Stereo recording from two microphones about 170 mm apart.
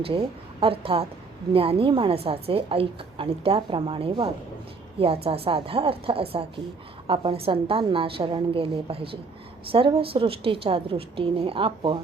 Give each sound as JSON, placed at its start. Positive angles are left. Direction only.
{"t": 0.0, "sound": "a woman's voice", "side_deg": -30}